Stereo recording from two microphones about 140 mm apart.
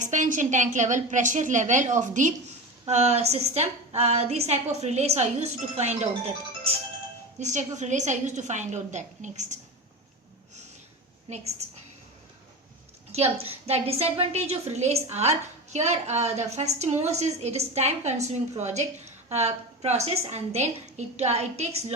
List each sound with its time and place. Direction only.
0.0 s a woman's voice: 60° right (ahead or behind)
2.8 s a woman's voice: 50° right (ahead or behind)
13.1 s a woman's voice: 50° right (ahead or behind)